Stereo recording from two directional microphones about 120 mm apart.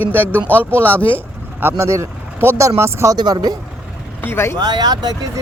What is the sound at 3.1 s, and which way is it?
Speech, 35° right (ahead or behind).